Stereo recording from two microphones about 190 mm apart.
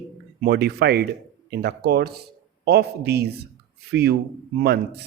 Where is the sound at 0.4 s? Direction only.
60° right (ahead or behind).